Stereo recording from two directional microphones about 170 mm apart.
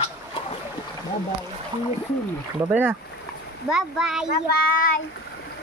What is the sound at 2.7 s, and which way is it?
Speech, 10° right (ahead or behind).